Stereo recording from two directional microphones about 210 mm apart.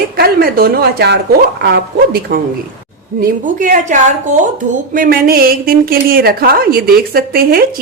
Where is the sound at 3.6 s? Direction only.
40° right (ahead or behind).